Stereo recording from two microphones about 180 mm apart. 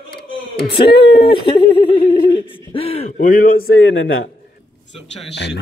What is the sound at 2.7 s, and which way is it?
Speech, 30° left (ahead or behind).